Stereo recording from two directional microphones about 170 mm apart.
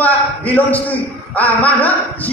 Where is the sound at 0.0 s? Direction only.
10° left (ahead or behind).